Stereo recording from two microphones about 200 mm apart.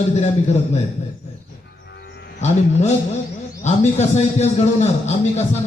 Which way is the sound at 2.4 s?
35° left (ahead or behind).